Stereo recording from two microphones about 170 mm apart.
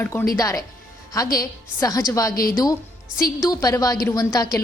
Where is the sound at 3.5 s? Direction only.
20° left (ahead or behind).